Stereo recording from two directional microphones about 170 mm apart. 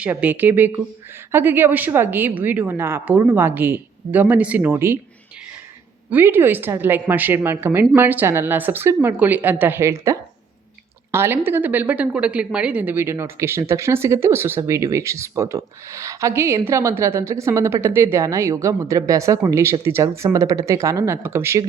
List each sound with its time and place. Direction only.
0.0 s a woman's voice: 10° right (ahead or behind)
6.1 s a woman's voice: 10° right (ahead or behind)